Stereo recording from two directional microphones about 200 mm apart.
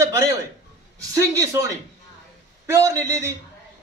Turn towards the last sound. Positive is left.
turn(degrees=-15)  # may be behind; listen again after turning